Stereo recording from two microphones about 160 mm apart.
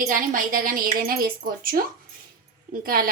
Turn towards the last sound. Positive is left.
turn(degrees=-65)  # may be behind; listen again after turning